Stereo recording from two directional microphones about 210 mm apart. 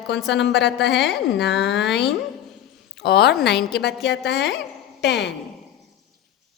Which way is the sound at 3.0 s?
50° left (ahead or behind).